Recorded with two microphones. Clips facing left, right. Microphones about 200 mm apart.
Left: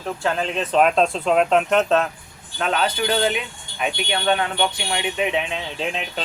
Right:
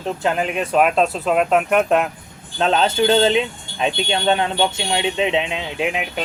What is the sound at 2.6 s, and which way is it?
Speech, 25° right (ahead or behind).